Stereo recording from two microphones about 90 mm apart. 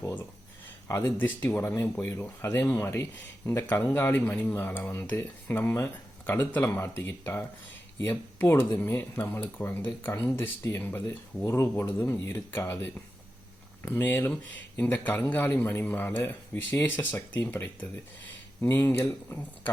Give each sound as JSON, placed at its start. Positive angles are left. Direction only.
{"t": 0.9, "sound": "speech", "side_deg": 30}
{"t": 14.0, "sound": "speech", "side_deg": 20}